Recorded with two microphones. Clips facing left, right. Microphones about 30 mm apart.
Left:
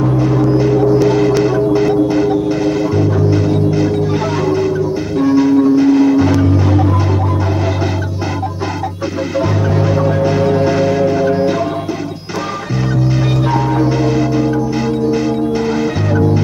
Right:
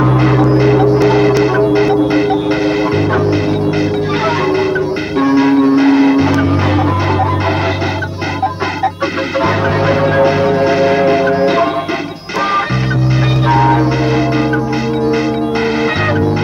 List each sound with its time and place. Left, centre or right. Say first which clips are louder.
0.0 s music: right 3 dB; right
0.4 s music: right 1 dB; right
0.8 s hum: right 1 dB; right
1.4 s music: right 2 dB; right
5.2 s bell: right 1 dB; right
9.4 s music: right 3 dB; right
10.3 s change ringing: right 1 dB; right
11.0 s change ringing: right 2 dB; right
13.5 s music: right 6 dB; right